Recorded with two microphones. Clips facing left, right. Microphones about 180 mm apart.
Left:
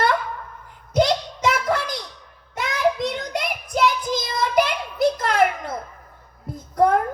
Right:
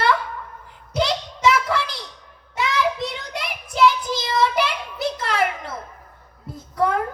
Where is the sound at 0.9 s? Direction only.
50° left (ahead or behind).